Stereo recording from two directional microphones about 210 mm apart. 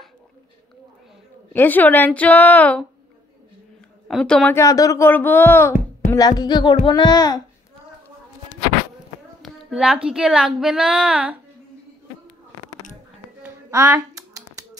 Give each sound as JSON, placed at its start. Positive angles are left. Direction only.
{"t": 1.5, "sound": "speech", "side_deg": 10}
{"t": 4.1, "sound": "a child's voice", "side_deg": 5}
{"t": 9.7, "sound": "a woman's voice", "side_deg": -5}
{"t": 13.4, "sound": "a sound", "side_deg": -15}